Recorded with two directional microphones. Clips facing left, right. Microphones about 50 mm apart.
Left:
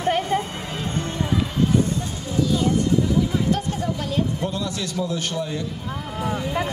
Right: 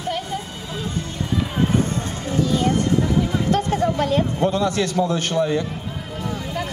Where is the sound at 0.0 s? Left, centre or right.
Left.